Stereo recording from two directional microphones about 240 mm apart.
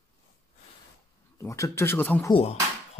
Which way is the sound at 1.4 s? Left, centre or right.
Centre.